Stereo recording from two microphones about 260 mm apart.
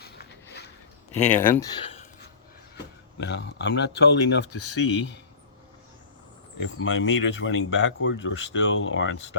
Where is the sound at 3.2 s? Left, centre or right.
Left.